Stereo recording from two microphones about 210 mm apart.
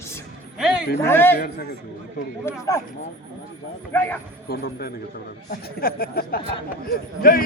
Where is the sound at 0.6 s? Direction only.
5° right (ahead or behind).